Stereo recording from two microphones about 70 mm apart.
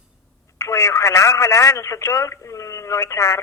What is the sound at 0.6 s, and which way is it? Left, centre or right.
Telephone, left.